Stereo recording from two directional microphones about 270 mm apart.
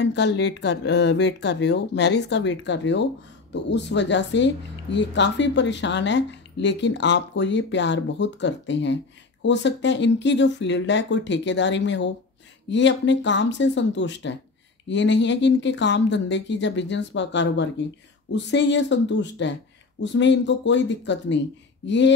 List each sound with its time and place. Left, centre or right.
0.0 s speech: left